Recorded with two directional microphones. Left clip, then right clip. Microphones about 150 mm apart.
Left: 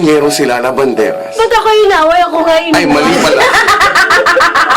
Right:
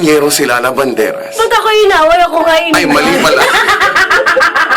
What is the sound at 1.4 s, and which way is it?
A woman's voice, 15° right (ahead or behind).